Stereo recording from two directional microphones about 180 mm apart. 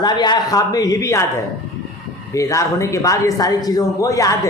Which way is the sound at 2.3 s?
15° left (ahead or behind).